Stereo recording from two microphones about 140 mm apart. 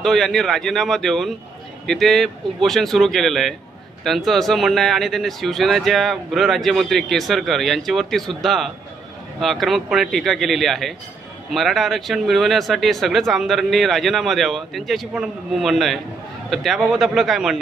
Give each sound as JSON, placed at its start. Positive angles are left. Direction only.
{"t": 0.0, "sound": "speech", "side_deg": 0}